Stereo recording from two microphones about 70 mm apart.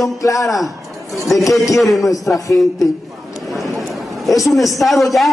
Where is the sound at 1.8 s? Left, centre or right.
Centre.